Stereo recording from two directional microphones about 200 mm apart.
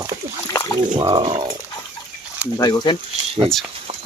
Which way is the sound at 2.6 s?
20° left (ahead or behind).